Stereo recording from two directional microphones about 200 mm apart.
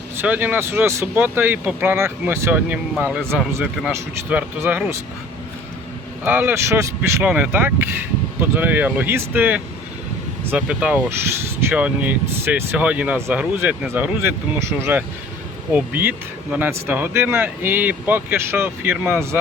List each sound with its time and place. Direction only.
0.2 s speech: 10° right (ahead or behind)
6.2 s speech: 10° right (ahead or behind)